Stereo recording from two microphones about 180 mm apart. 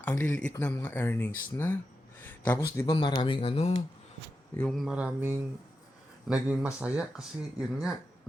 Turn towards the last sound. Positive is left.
turn(degrees=-5)  # may be behind; listen again after turning